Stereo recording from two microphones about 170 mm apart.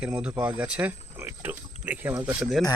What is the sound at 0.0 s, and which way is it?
Speech, 5° right (ahead or behind).